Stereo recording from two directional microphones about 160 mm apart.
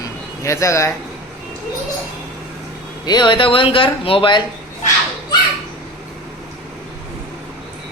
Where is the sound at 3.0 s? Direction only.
25° left (ahead or behind).